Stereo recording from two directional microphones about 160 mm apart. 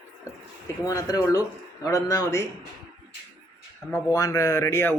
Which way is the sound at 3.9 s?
20° left (ahead or behind).